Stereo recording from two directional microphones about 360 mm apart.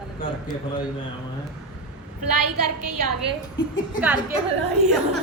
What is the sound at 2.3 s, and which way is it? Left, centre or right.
Speech, right.